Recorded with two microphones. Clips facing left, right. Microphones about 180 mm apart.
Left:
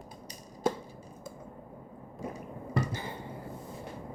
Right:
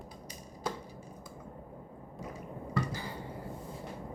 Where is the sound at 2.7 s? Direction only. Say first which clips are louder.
Left 2 dB; 25° left (ahead or behind).